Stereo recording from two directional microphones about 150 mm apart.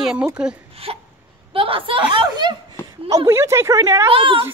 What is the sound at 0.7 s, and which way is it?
Hiccup, 40° right (ahead or behind).